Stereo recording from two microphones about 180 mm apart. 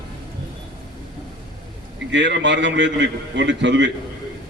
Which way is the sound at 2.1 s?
80° right.